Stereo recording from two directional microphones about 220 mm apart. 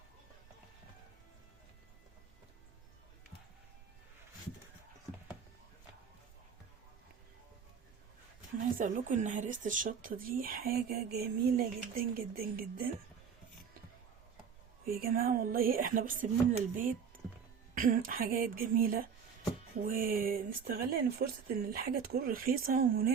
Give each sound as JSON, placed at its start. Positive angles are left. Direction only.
{"t": 8.5, "sound": "speech", "side_deg": -35}
{"t": 14.8, "sound": "speech", "side_deg": -45}